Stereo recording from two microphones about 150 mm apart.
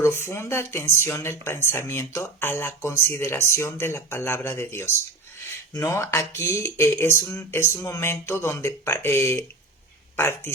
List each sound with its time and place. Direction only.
0.0 s speech: 15° left (ahead or behind)